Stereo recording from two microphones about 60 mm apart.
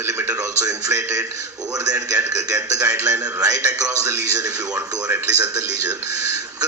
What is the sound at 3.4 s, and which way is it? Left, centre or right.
A man's voice, right.